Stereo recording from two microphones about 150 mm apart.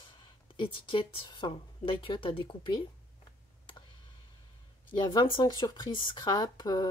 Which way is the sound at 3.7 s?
30° left (ahead or behind).